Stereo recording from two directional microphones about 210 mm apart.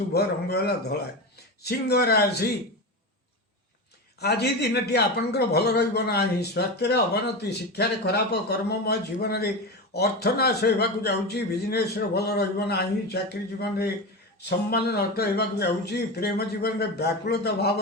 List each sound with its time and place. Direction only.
0.1 s a man's voice: 50° left (ahead or behind)
4.2 s a man's voice: 50° left (ahead or behind)